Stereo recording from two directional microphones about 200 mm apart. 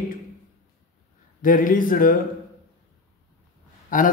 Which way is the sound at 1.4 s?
45° left (ahead or behind).